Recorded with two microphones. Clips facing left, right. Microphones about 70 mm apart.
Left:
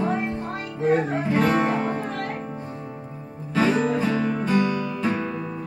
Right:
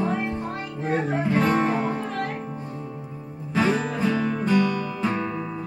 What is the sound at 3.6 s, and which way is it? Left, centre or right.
Music, left.